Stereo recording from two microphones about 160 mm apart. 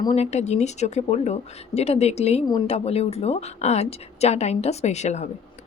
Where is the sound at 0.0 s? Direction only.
40° left (ahead or behind).